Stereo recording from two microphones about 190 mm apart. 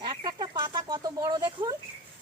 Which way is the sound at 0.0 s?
25° right (ahead or behind).